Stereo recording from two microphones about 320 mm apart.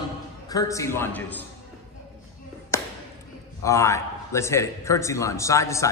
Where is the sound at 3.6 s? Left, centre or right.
Centre.